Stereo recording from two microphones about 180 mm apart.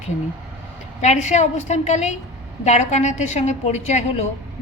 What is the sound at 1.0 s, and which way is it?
A woman's voice, 40° left (ahead or behind).